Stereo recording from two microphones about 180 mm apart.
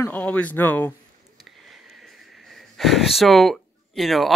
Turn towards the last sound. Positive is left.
turn(degrees=0)  # may be behind; listen again after turning